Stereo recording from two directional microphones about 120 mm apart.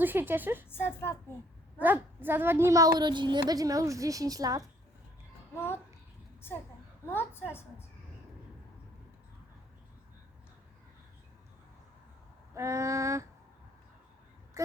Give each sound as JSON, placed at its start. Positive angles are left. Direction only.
{"t": 0.0, "sound": "a woman's voice", "side_deg": -15}
{"t": 0.7, "sound": "a woman's voice", "side_deg": 20}
{"t": 1.8, "sound": "a woman's voice", "side_deg": -15}
{"t": 5.5, "sound": "a woman's voice", "side_deg": 20}
{"t": 7.1, "sound": "a woman's voice", "side_deg": 20}
{"t": 12.5, "sound": "a woman's voice", "side_deg": -25}